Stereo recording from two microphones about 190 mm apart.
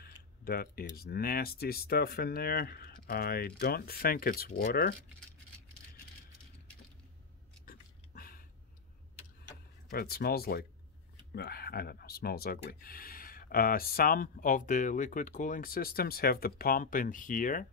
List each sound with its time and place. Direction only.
0.0 s speech: 50° left (ahead or behind)
7.6 s a sound: 50° left (ahead or behind)
9.8 s speech: 55° left (ahead or behind)